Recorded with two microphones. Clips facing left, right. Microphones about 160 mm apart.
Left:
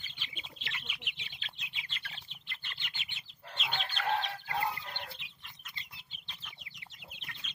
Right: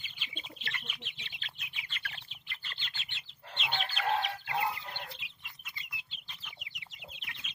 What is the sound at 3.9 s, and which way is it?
Chicken, 10° right (ahead or behind).